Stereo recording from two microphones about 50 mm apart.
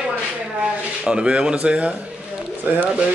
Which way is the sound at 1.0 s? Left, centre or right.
Right.